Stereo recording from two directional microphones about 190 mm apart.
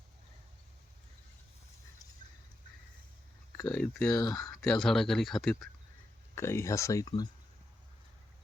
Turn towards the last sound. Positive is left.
turn(degrees=20)  # may be behind; listen again after turning